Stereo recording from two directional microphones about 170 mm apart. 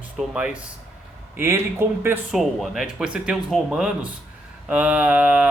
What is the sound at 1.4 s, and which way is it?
Mantra, 15° right (ahead or behind).